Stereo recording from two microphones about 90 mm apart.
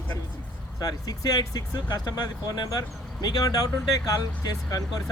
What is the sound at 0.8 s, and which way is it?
Speech, 45° left (ahead or behind).